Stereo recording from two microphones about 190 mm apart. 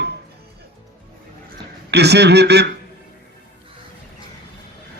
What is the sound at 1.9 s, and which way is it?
Speech, 60° right (ahead or behind).